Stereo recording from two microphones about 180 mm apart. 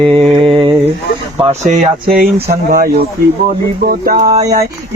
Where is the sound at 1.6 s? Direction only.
50° right (ahead or behind).